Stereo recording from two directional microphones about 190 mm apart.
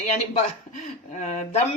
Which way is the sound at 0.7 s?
40° left (ahead or behind).